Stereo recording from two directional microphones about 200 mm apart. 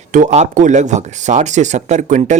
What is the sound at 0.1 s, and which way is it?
Speech, 40° right (ahead or behind).